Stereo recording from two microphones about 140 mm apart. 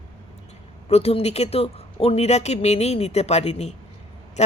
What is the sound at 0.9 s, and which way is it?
A woman's voice, 45° left (ahead or behind).